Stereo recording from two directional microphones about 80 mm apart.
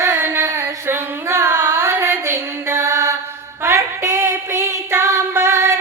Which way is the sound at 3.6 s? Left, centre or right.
Right.